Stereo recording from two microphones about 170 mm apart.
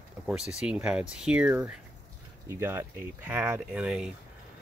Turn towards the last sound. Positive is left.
turn(degrees=-5)  # may be behind; listen again after turning